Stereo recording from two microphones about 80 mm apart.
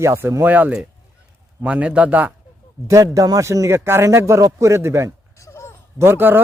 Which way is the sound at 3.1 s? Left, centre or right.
Right.